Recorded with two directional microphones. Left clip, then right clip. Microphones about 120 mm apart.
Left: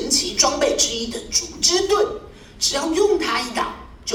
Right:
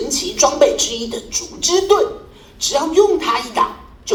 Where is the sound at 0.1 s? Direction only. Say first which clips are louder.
Right 2 dB; 35° right (ahead or behind).